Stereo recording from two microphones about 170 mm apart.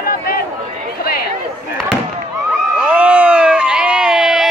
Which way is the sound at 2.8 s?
5° right (ahead or behind).